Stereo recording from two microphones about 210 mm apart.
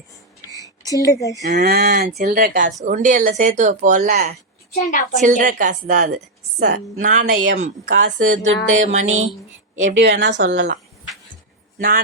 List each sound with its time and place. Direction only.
0.5 s a sound: 15° left (ahead or behind)
1.5 s speech: 45° right (ahead or behind)
4.7 s a woman's voice: 40° left (ahead or behind)
5.2 s speech: 40° right (ahead or behind)
7.6 s speech: 65° right (ahead or behind)
8.4 s a sound: 70° right (ahead or behind)
8.8 s speech: 35° right (ahead or behind)
9.0 s a sound: 70° right (ahead or behind)
10.0 s speech: 55° right (ahead or behind)